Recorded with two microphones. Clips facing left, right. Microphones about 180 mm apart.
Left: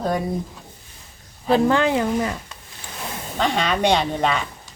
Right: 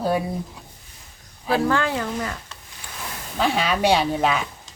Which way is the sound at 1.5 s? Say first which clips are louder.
Left 4 dB; 20° left (ahead or behind).